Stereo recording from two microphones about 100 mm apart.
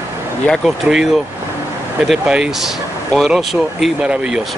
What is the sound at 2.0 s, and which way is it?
Speech, 5° right (ahead or behind).